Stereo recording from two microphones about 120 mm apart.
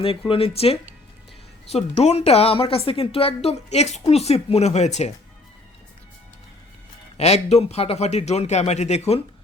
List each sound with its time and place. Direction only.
0.3 s a woman's voice: 50° left (ahead or behind); by 5.1 s 70° left (ahead or behind)
7.2 s a woman's voice: 65° left (ahead or behind)